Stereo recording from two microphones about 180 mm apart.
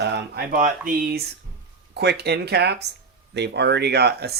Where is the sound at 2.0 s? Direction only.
65° right (ahead or behind).